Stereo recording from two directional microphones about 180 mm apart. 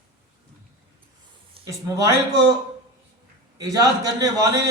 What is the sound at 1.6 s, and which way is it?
Speech, 20° right (ahead or behind).